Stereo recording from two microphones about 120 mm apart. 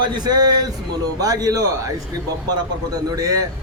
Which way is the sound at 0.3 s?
35° right (ahead or behind).